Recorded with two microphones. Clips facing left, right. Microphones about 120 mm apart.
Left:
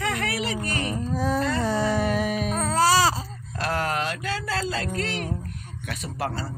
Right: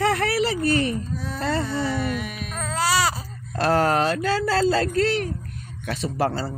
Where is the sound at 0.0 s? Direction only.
35° right (ahead or behind).